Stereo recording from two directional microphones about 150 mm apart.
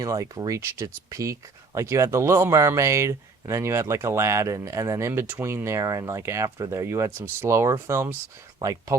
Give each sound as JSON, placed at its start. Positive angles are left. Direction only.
{"t": 0.0, "sound": "speech", "side_deg": -25}